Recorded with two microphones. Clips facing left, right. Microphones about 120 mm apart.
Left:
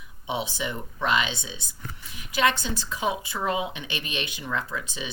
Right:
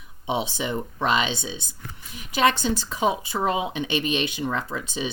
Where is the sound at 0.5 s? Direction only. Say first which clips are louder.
Right 4 dB; 25° right (ahead or behind).